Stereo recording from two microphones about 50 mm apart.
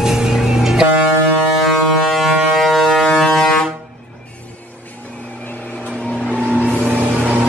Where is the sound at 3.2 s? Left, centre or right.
Centre.